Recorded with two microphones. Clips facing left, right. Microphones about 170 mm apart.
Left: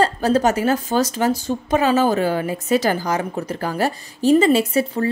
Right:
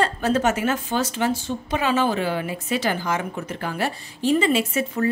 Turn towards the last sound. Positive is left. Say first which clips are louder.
# left 3 dB
turn(degrees=35)  # may be behind; listen again after turning